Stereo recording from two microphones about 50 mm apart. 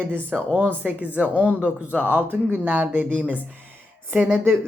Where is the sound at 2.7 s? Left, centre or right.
Right.